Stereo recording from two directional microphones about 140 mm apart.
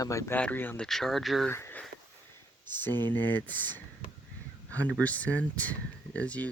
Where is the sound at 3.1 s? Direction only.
15° left (ahead or behind).